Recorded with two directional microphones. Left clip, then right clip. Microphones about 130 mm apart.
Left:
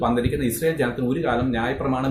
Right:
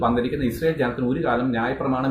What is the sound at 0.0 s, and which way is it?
Speech, 15° left (ahead or behind).